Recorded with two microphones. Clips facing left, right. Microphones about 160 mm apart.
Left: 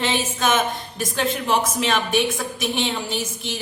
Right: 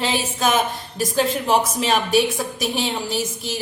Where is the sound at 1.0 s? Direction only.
35° right (ahead or behind).